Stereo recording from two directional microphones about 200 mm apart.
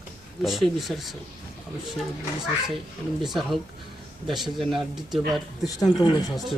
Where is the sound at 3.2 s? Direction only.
Centre (ahead or behind).